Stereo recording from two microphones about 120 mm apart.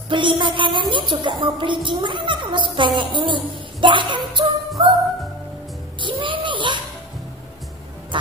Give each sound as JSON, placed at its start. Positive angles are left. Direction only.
{"t": 0.1, "sound": "a woman's voice", "side_deg": -40}
{"t": 5.9, "sound": "a sound", "side_deg": -45}
{"t": 8.1, "sound": "quack", "side_deg": -45}